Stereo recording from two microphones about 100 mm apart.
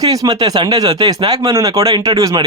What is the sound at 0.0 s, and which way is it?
Speech, 40° right (ahead or behind).